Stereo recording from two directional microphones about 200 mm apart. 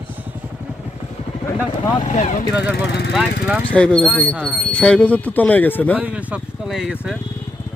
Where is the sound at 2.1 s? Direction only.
35° left (ahead or behind).